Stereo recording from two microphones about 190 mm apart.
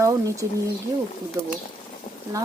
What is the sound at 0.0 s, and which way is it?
Speech, 15° right (ahead or behind).